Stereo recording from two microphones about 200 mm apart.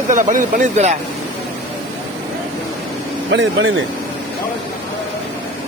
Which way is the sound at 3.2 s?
65° right (ahead or behind).